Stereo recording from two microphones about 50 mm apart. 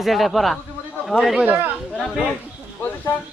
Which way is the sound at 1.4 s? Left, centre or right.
Right.